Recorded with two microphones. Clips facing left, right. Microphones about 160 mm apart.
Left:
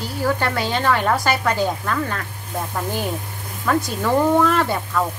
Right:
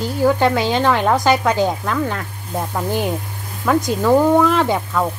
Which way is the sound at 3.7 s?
15° right (ahead or behind).